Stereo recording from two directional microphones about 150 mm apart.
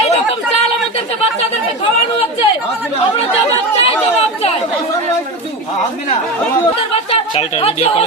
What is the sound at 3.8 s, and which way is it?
Speech, 40° left (ahead or behind).